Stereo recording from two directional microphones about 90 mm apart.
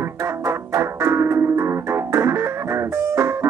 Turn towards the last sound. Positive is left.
turn(degrees=-30)  # may be behind; listen again after turning